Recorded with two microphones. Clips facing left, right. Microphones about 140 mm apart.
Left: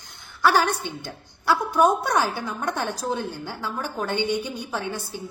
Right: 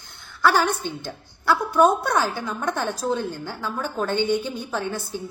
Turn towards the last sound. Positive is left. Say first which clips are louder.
# right 2 dB
turn(degrees=15)  # may be behind; listen again after turning